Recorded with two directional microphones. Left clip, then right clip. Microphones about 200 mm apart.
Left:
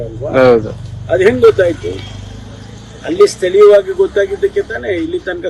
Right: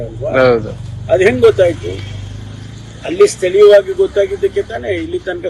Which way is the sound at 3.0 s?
15° left (ahead or behind).